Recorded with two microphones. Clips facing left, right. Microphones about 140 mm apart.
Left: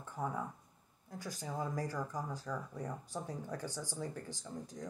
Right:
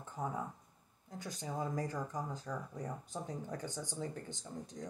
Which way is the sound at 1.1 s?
20° right (ahead or behind).